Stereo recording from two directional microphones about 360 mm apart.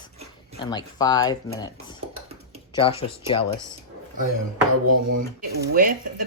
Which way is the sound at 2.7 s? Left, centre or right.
Centre.